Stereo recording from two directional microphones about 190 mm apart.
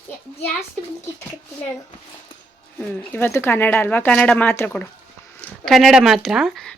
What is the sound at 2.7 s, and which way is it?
Speech, 10° left (ahead or behind).